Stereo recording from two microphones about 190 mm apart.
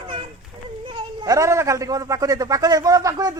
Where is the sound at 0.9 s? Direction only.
20° right (ahead or behind).